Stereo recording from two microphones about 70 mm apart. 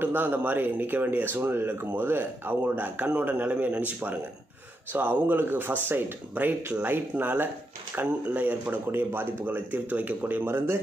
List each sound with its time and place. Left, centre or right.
0.0 s speech: right